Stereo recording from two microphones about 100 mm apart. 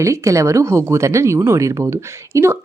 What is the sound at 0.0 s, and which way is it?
A woman's voice, 30° right (ahead or behind).